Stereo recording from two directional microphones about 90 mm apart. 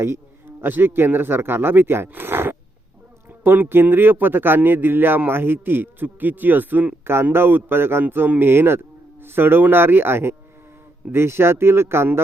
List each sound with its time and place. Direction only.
0.0 s a man's voice: 25° right (ahead or behind)